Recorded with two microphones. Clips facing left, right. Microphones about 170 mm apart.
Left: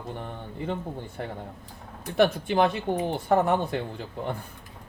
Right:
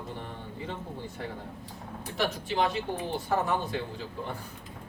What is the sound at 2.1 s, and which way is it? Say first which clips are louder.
Speech: left 8 dB; 55° left (ahead or behind).